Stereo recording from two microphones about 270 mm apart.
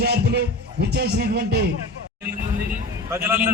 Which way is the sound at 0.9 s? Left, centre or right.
Right.